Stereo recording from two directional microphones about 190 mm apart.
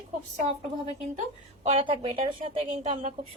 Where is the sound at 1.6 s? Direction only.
30° right (ahead or behind).